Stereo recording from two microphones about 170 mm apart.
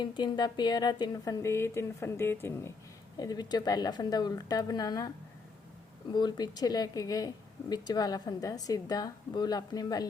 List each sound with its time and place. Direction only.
0.0 s speech: 25° left (ahead or behind)
6.1 s speech: 25° left (ahead or behind)